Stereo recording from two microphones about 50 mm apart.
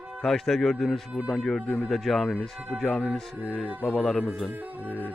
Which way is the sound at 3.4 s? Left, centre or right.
Right.